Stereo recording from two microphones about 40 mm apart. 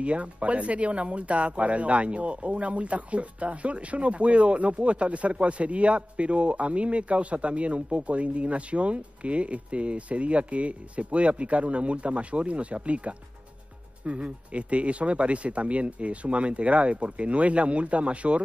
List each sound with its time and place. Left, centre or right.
0.0 s speech: right